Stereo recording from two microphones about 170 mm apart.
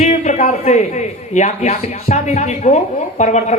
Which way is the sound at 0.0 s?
45° left (ahead or behind).